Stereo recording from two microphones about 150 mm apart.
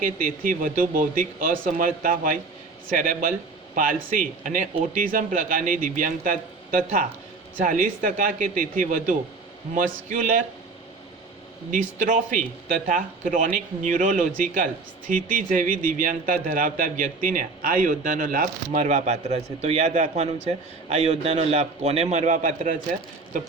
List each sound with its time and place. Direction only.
0.0 s a man's voice: 65° right (ahead or behind)
11.7 s a man's voice: 60° right (ahead or behind)